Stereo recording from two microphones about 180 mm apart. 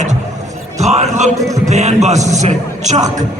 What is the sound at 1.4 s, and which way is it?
Speech, 20° right (ahead or behind).